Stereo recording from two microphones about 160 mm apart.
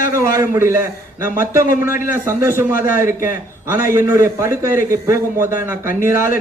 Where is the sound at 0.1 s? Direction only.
15° right (ahead or behind).